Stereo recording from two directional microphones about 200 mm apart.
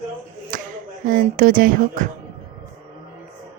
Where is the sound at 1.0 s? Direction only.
45° right (ahead or behind).